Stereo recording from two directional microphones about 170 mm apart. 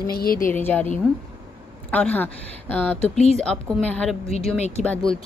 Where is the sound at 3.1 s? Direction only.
40° left (ahead or behind).